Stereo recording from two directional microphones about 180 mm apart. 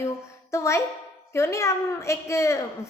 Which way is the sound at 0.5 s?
15° left (ahead or behind).